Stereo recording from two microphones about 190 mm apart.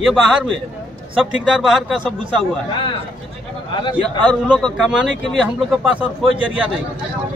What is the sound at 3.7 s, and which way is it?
Speech, 25° left (ahead or behind).